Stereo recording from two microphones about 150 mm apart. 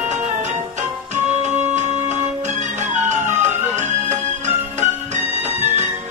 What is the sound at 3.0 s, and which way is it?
Music, 50° right (ahead or behind).